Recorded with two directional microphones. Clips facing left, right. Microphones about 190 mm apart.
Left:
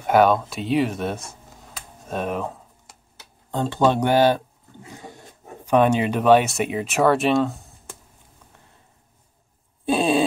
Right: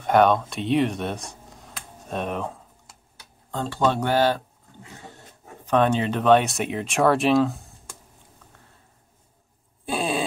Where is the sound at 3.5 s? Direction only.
20° left (ahead or behind).